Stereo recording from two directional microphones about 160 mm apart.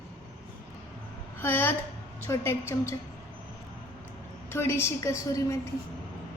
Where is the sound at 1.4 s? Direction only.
15° left (ahead or behind).